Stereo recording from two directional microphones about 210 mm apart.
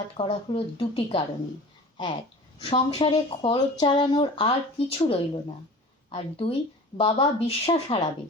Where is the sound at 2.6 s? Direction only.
25° left (ahead or behind).